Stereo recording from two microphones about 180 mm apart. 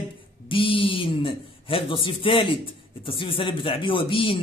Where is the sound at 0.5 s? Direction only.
30° left (ahead or behind).